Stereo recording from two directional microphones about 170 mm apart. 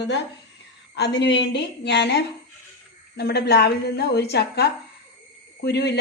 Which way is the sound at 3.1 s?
75° left (ahead or behind).